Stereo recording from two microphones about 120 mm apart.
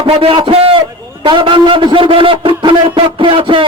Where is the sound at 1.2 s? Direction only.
45° right (ahead or behind).